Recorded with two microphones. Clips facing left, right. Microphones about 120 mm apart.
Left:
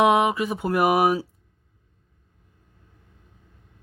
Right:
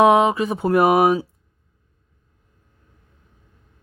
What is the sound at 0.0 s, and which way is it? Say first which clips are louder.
Speech: right 4 dB; 25° right (ahead or behind).